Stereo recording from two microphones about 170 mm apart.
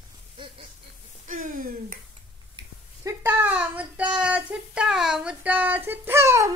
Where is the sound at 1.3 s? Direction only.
55° right (ahead or behind).